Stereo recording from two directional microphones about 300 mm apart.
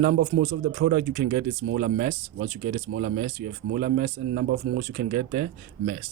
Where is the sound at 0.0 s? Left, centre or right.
Right.